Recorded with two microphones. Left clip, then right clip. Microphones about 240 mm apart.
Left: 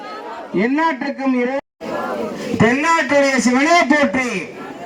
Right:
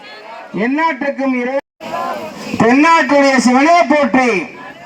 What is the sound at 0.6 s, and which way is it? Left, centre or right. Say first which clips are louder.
A man's voice: right 3 dB; right.